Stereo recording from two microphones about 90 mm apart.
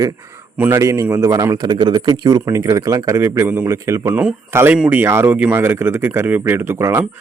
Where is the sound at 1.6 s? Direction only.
55° right (ahead or behind); by 4.1 s 35° right (ahead or behind).